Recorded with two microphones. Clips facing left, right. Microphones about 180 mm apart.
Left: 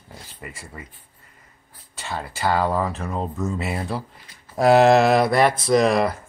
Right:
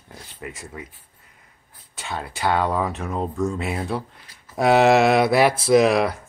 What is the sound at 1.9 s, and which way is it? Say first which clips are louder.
Speech: even; centre (ahead or behind).